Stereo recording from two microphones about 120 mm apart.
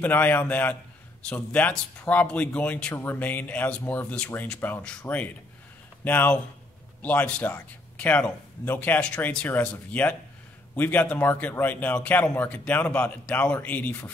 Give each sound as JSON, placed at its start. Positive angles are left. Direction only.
{"t": 0.0, "sound": "a man's voice", "side_deg": 15}